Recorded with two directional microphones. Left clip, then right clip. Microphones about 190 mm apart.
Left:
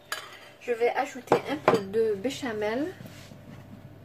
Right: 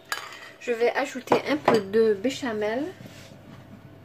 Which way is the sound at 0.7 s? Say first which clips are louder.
Right 2 dB; 35° right (ahead or behind).